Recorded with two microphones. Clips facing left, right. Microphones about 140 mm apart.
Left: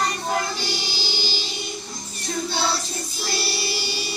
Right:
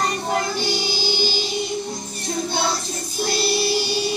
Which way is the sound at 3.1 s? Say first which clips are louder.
Right 8 dB; 45° right (ahead or behind).